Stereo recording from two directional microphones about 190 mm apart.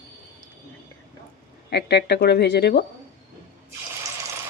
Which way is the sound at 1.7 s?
60° left (ahead or behind).